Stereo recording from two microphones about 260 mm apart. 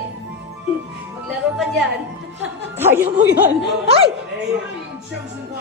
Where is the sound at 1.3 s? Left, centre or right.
Centre.